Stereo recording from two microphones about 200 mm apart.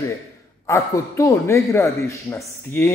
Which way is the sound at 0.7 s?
15° left (ahead or behind).